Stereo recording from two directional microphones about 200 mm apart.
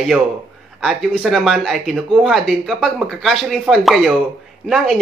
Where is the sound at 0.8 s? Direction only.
Centre (ahead or behind).